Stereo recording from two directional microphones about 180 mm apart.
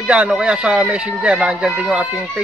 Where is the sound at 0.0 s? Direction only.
5° right (ahead or behind).